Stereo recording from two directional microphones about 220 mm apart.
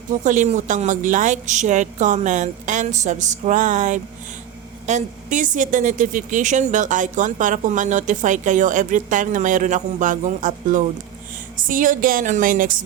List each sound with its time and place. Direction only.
0.1 s a woman's voice: 35° right (ahead or behind)